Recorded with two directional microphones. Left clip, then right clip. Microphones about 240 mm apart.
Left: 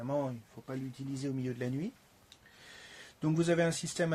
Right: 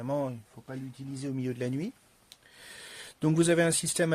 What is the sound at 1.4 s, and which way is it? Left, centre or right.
Speech, right.